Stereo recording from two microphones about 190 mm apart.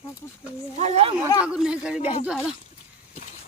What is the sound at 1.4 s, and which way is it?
Speech, 5° right (ahead or behind).